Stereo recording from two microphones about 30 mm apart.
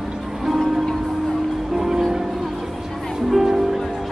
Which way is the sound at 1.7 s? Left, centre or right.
Centre.